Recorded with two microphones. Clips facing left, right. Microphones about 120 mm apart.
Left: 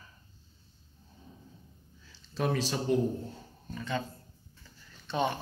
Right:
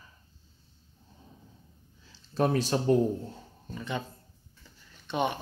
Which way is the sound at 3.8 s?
20° right (ahead or behind).